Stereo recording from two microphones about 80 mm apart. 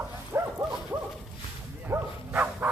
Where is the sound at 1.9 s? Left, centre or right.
Right.